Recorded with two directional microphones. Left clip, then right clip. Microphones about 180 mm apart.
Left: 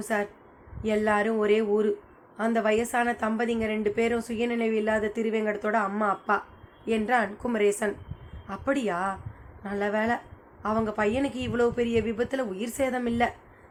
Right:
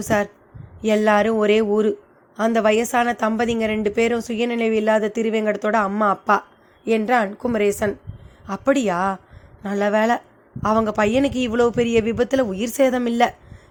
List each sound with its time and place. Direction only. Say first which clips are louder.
0.0 s a woman's voice: right 8 dB; 50° right (ahead or behind)